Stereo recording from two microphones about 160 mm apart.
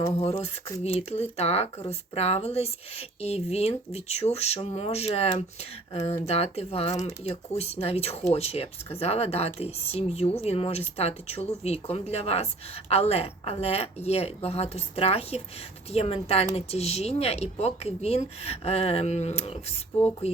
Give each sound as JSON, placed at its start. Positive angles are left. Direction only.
{"t": 0.2, "sound": "speech", "side_deg": 40}